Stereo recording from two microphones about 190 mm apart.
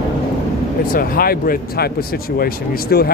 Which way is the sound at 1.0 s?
50° left (ahead or behind).